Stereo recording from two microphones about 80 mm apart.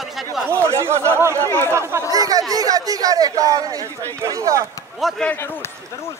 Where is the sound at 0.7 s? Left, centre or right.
Right.